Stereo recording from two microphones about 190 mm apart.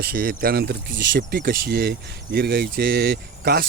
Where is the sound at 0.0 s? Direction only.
50° right (ahead or behind).